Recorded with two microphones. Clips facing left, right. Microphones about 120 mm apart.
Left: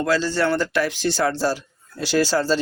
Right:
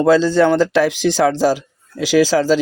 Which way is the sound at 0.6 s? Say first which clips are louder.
Right 7 dB; 90° right.